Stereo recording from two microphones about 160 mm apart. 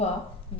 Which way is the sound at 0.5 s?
35° left (ahead or behind).